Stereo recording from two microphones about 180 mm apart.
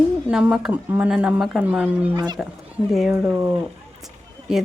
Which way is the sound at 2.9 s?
Centre (ahead or behind).